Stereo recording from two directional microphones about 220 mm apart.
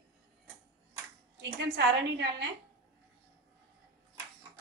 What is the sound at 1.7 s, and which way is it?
Speech, 50° right (ahead or behind).